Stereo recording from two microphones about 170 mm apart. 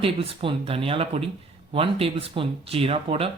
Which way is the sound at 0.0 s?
35° right (ahead or behind).